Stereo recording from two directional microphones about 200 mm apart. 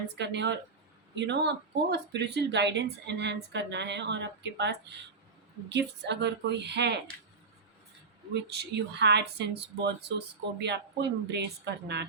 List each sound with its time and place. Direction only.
0.2 s speech: 60° right (ahead or behind)
8.3 s speech: 55° right (ahead or behind)